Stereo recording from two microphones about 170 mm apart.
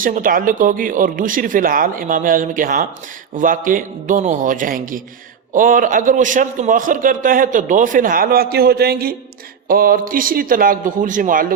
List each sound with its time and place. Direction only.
0.0 s a man's voice: 55° right (ahead or behind)